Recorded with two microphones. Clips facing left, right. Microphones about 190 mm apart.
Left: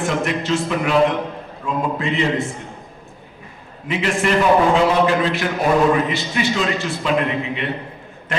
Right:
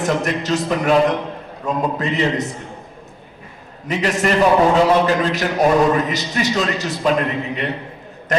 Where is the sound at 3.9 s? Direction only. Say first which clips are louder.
Right 1 dB; 40° right (ahead or behind).